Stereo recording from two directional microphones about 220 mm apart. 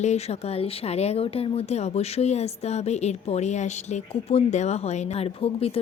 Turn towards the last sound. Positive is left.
turn(degrees=25)  # may be behind; listen again after turning